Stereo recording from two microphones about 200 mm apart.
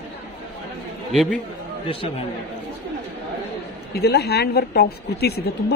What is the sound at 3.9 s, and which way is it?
Speech, 55° left (ahead or behind).